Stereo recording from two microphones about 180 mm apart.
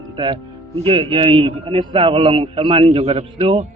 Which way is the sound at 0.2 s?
30° right (ahead or behind).